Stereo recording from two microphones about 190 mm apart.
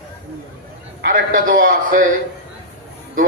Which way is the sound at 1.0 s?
45° right (ahead or behind).